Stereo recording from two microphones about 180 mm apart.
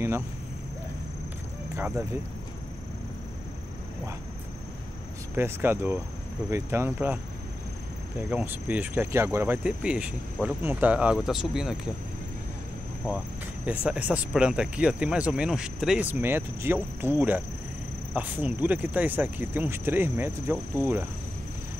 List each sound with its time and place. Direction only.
1.8 s speech: 10° right (ahead or behind)
5.3 s speech: 10° right (ahead or behind)
8.3 s speech: 5° right (ahead or behind)
13.7 s speech: 10° right (ahead or behind)